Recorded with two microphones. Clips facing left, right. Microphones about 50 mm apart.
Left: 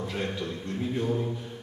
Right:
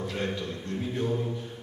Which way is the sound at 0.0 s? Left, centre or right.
Centre.